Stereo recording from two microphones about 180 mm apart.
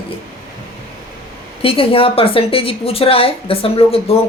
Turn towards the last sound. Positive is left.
turn(degrees=30)  # may be behind; listen again after turning